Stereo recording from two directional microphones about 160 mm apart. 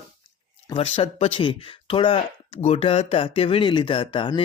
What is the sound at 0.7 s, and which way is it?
Speech, 35° left (ahead or behind).